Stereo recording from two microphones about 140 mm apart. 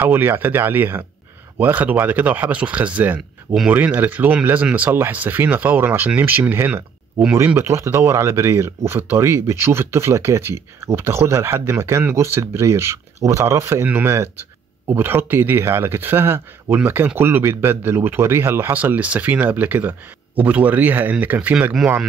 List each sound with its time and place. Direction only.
0.0 s speech: 15° right (ahead or behind)